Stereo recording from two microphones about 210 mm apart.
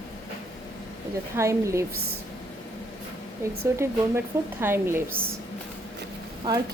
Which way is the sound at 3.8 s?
10° right (ahead or behind).